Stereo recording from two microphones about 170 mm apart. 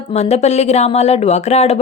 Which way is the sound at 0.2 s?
40° left (ahead or behind).